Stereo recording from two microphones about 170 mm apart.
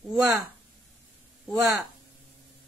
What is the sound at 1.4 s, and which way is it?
Speech, centre (ahead or behind).